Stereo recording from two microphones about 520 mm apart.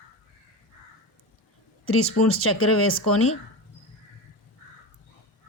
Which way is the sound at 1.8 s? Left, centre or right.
Left.